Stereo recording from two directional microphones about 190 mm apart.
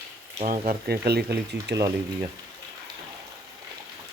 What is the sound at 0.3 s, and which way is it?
Speech, 45° right (ahead or behind).